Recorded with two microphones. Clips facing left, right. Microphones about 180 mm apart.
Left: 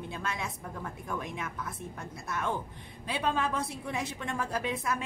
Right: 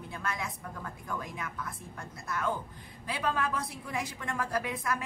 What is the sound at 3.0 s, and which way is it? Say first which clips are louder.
A woman's voice: left 1 dB; 25° left (ahead or behind).